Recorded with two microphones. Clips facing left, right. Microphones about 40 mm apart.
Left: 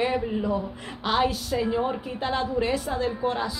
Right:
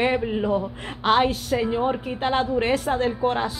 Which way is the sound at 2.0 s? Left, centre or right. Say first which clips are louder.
Right 4 dB; right.